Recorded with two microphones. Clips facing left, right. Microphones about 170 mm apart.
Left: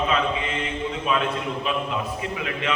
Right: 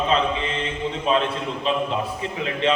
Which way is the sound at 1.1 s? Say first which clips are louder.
Right 4 dB; 30° right (ahead or behind).